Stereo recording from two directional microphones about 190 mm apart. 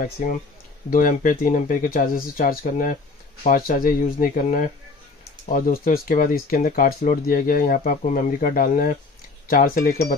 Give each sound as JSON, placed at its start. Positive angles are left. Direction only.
{"t": 0.0, "sound": "speech", "side_deg": 45}